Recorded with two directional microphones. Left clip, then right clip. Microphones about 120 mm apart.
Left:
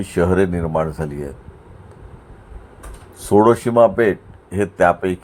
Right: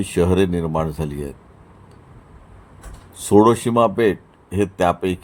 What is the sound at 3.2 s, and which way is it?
Speech, 15° right (ahead or behind).